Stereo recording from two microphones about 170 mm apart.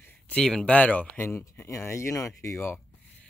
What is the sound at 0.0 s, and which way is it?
Speech, 5° left (ahead or behind).